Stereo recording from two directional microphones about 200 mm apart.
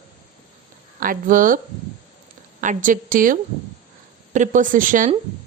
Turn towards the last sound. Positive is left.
turn(degrees=-40)  # may be behind; listen again after turning